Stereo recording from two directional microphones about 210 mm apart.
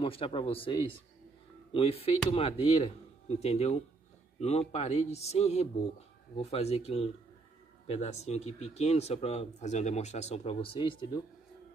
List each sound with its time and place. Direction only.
0.0 s speech: 25° left (ahead or behind)